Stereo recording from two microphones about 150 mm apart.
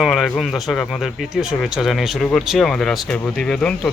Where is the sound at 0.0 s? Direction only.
Centre (ahead or behind).